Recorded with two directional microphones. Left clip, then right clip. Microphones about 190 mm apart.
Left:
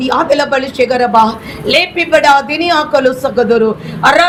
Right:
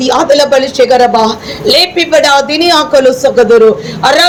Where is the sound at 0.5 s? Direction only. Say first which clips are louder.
Right 6 dB; 25° left (ahead or behind).